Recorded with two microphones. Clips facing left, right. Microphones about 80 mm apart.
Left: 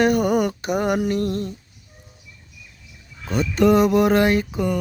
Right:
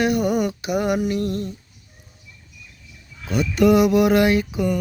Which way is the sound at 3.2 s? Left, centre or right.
Left.